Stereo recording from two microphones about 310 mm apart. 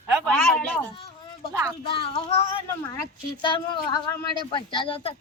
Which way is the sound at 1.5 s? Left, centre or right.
Centre.